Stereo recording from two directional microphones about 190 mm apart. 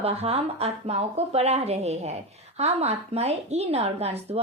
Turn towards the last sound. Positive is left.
turn(degrees=-35)  # may be behind; listen again after turning